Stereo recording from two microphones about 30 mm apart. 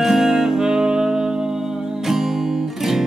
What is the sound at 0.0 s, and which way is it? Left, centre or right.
Music, centre.